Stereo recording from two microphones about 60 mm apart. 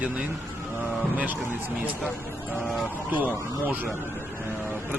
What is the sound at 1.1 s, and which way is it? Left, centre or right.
Speech, right.